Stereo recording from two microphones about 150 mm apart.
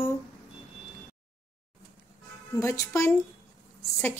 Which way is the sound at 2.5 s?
20° left (ahead or behind).